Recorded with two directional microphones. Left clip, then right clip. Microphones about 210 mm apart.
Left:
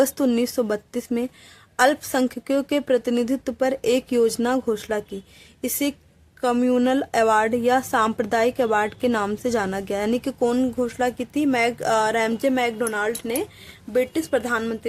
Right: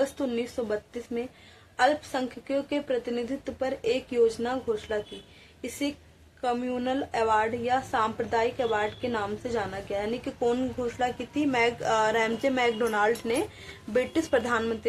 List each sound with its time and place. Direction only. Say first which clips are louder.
0.0 s a woman's voice: left 8 dB; 55° left (ahead or behind)
6.4 s a woman's voice: left 8 dB; 55° left (ahead or behind)